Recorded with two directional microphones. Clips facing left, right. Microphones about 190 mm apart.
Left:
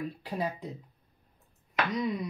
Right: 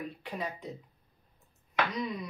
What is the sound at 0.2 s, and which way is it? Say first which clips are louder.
Speech: left 4 dB; 35° left (ahead or behind).